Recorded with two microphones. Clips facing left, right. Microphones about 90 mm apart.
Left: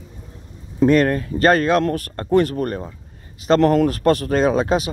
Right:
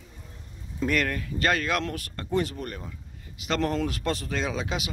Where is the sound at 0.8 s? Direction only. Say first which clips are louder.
Left 12 dB; 35° left (ahead or behind).